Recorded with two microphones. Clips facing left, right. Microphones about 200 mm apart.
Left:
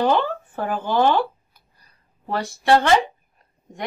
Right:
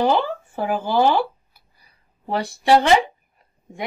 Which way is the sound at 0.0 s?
10° right (ahead or behind).